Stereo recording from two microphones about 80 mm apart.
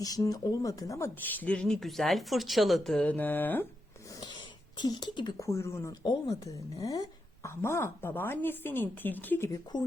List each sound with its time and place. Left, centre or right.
0.0 s a woman's voice: left
1.2 s speech: left
1.5 s a woman's voice: centre
3.0 s speech: centre
4.8 s speech: left
5.4 s speech: left
5.9 s a woman's voice: left
7.5 s speech: left
9.7 s speech: left